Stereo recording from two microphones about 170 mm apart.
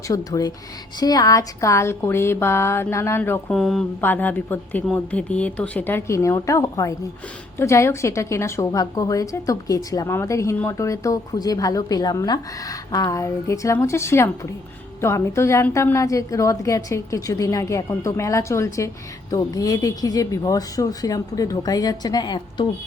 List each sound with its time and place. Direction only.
0.1 s a woman's voice: 20° left (ahead or behind)
3.5 s a woman's voice: centre (ahead or behind); by 22.6 s 25° left (ahead or behind)